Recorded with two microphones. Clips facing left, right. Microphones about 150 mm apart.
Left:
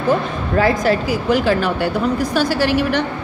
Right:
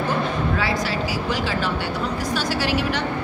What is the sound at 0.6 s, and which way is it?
A woman's voice, 50° left (ahead or behind).